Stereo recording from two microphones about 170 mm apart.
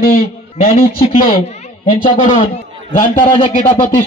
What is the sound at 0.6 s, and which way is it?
Speech, 40° left (ahead or behind).